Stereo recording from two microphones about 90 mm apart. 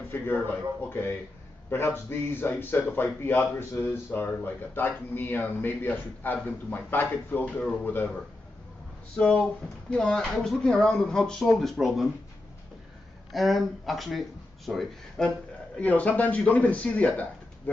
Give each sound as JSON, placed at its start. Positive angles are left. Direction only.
{"t": 0.8, "sound": "speech", "side_deg": 25}
{"t": 9.1, "sound": "speech", "side_deg": 10}
{"t": 13.3, "sound": "speech", "side_deg": 0}
{"t": 15.8, "sound": "speech", "side_deg": 15}